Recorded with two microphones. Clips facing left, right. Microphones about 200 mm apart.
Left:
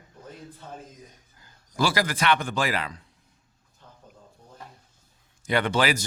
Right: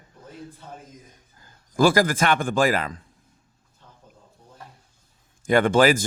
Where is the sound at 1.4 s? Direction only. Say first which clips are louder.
Right 7 dB; 50° right (ahead or behind).